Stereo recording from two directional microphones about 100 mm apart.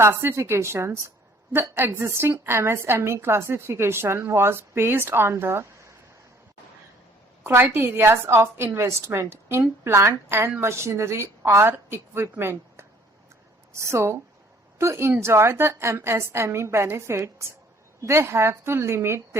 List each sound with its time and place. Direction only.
0.0 s a woman's voice: 20° right (ahead or behind)
7.4 s a woman's voice: 25° right (ahead or behind)